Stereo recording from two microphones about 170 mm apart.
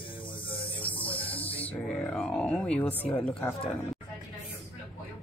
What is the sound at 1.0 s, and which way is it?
Music, 10° left (ahead or behind).